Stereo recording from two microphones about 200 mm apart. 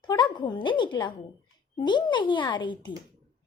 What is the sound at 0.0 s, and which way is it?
A child's voice, 20° left (ahead or behind).